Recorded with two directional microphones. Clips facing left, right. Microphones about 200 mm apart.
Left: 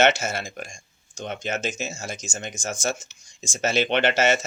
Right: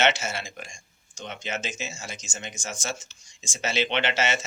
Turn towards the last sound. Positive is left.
turn(degrees=40)  # may be behind; listen again after turning